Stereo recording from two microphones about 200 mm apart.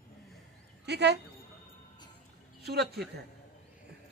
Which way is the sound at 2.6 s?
55° right (ahead or behind).